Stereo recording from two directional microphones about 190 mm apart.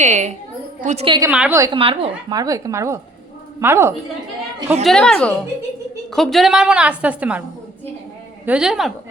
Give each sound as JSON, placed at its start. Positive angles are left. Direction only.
{"t": 0.0, "sound": "a woman's voice", "side_deg": -40}
{"t": 1.0, "sound": "a woman's voice", "side_deg": -25}
{"t": 1.3, "sound": "a woman's voice", "side_deg": -5}
{"t": 1.5, "sound": "a woman's voice", "side_deg": -15}
{"t": 1.8, "sound": "a woman's voice", "side_deg": -30}
{"t": 4.8, "sound": "a woman's voice", "side_deg": 0}
{"t": 8.4, "sound": "a woman's voice", "side_deg": -5}